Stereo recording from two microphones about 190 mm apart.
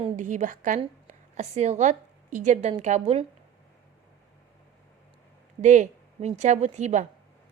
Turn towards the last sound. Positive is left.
turn(degrees=-40)  # may be behind; listen again after turning